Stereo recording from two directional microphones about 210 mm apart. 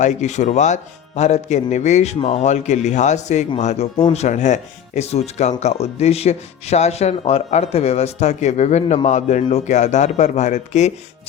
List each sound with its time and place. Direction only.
0.0 s speech: 35° left (ahead or behind)